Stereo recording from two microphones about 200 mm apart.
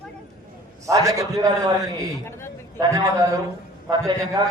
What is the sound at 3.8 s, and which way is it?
Speech, 20° right (ahead or behind).